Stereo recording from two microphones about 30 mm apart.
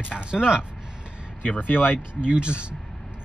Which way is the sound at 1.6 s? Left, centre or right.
Left.